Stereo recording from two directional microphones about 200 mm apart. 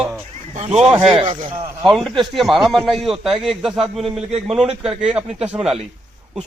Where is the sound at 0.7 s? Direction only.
5° right (ahead or behind).